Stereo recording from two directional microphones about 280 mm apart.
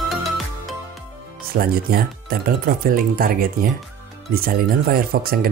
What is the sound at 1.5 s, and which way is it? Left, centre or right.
Speech, right.